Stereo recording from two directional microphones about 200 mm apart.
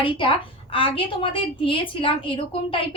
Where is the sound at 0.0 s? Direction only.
25° left (ahead or behind).